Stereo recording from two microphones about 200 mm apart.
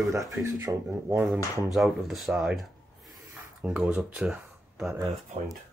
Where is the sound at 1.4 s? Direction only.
15° left (ahead or behind).